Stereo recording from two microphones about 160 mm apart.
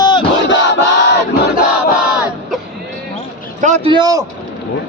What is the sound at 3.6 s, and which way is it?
Speech, 45° right (ahead or behind).